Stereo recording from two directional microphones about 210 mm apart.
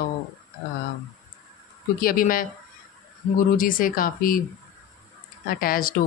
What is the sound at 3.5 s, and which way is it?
Speech, 40° left (ahead or behind).